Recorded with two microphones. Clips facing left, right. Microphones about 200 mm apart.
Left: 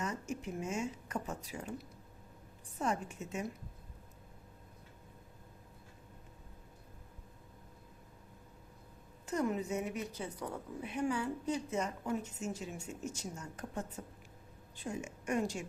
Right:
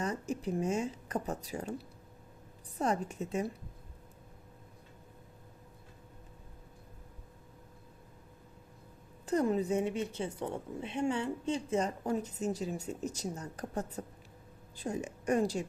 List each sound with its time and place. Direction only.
0.0 s a woman's voice: 35° right (ahead or behind)
9.2 s a woman's voice: 35° right (ahead or behind)